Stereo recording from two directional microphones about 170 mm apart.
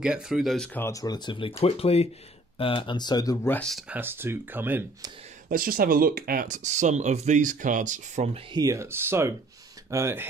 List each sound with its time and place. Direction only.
0.0 s speech: 5° right (ahead or behind)
0.7 s speech: 20° left (ahead or behind)
3.5 s speech: 5° left (ahead or behind)
3.9 s speech: 15° right (ahead or behind)
5.5 s speech: 60° right (ahead or behind)
8.5 s speech: 20° right (ahead or behind)